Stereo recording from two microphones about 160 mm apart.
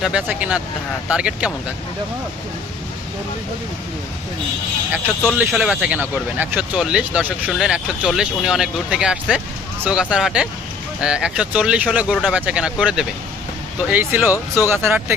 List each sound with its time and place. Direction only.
0.0 s speech: 10° right (ahead or behind)
5.4 s speech: centre (ahead or behind)
14.3 s speech: 20° left (ahead or behind)
14.7 s speech: 15° right (ahead or behind)